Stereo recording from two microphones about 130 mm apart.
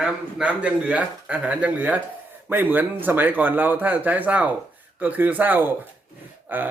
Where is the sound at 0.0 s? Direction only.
10° right (ahead or behind).